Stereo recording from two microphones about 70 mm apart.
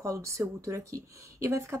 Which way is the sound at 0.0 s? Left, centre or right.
Right.